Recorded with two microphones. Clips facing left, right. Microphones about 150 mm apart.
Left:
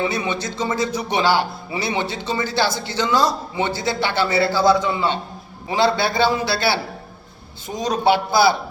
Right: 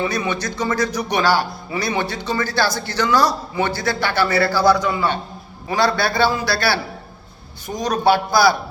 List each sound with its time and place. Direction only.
0.1 s a man's voice: 25° left (ahead or behind)